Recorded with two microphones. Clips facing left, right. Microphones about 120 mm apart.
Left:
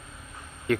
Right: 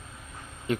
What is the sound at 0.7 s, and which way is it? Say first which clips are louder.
Speech: left 3 dB; 20° right (ahead or behind).